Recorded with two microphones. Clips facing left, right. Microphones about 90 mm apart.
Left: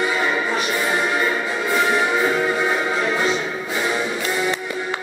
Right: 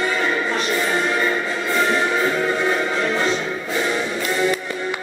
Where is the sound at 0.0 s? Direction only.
10° left (ahead or behind).